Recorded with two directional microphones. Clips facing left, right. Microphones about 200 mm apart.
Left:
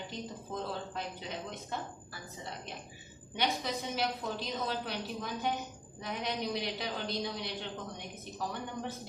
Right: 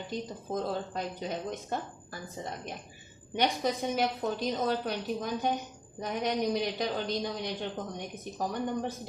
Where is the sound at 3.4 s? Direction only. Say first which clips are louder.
Right 5 dB; 45° right (ahead or behind).